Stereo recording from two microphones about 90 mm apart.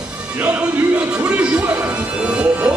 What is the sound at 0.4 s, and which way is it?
Music, 15° right (ahead or behind).